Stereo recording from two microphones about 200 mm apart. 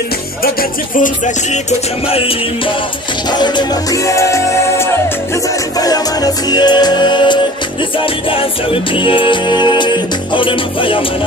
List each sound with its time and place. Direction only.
0.4 s music: 45° left (ahead or behind); by 11.1 s 25° left (ahead or behind)